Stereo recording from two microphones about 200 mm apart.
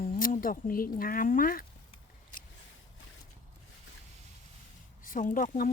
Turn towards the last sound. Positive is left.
turn(degrees=40)  # may be behind; listen again after turning